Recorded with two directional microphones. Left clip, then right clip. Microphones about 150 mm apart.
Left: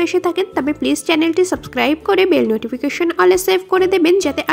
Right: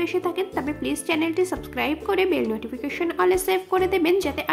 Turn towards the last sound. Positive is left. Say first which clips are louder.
# left 7 dB
turn(degrees=40)  # may be behind; listen again after turning